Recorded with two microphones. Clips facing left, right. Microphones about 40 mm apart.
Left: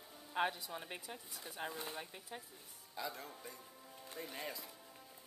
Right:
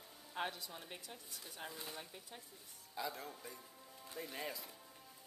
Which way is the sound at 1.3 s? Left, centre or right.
Centre.